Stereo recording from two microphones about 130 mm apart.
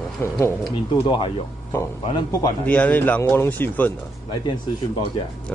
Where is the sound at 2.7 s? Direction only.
10° left (ahead or behind).